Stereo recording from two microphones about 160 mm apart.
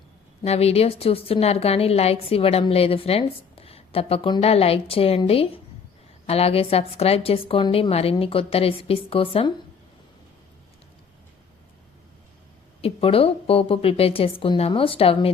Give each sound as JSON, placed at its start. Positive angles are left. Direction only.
{"t": 0.4, "sound": "a woman's voice", "side_deg": 40}
{"t": 12.8, "sound": "a woman's voice", "side_deg": 35}